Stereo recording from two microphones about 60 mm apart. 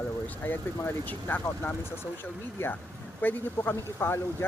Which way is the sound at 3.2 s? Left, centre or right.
Left.